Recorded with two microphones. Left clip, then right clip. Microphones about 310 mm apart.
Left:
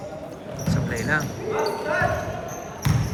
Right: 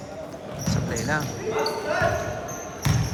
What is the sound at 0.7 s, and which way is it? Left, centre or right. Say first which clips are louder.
Basketball bounce: left 2 dB; centre.